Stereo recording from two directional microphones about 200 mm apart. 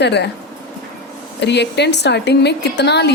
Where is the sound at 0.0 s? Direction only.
60° left (ahead or behind).